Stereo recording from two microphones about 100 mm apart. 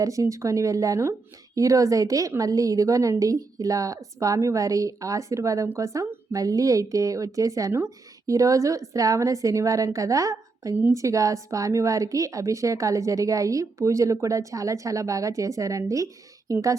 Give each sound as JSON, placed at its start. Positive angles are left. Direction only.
{"t": 0.0, "sound": "a woman's voice", "side_deg": -35}